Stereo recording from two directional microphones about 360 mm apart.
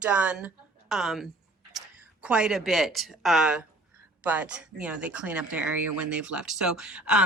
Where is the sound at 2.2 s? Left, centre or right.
Centre.